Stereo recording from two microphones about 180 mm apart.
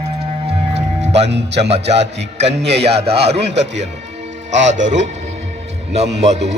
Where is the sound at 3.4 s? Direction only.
75° right (ahead or behind).